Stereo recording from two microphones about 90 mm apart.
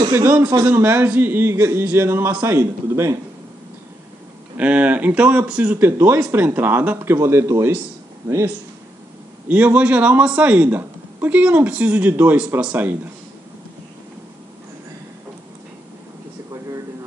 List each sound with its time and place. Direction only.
0.3 s speech: 20° right (ahead or behind)
4.6 s speech: 15° right (ahead or behind)
7.2 s speech: 30° right (ahead or behind)
9.5 s a man's voice: 20° right (ahead or behind)